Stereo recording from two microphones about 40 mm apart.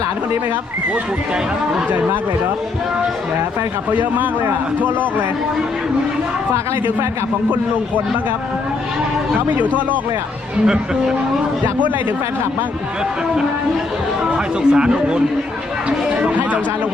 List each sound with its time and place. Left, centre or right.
3.9 s a man's voice: right
14.3 s speech: right
15.9 s a sound: right
16.3 s speech: right